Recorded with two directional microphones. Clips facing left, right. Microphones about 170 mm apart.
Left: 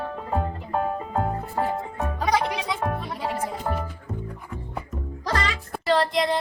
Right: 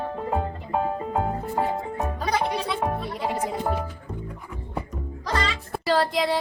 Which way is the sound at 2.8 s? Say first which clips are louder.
Right 1 dB; 15° right (ahead or behind).